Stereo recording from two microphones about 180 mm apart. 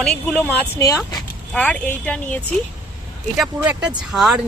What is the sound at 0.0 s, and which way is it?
Speech, 5° left (ahead or behind).